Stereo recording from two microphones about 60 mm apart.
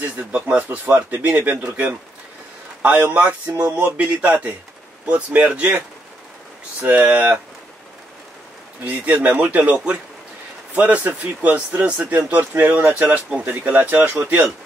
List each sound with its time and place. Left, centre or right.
0.0 s speech: right
2.8 s speech: right
8.8 s speech: right